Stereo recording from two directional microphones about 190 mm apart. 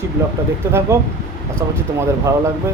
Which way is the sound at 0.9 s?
15° right (ahead or behind).